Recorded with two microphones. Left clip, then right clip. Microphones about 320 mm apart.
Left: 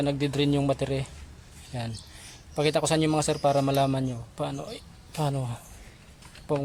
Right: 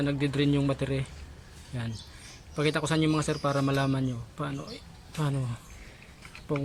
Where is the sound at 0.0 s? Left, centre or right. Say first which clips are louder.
Left 2 dB; centre.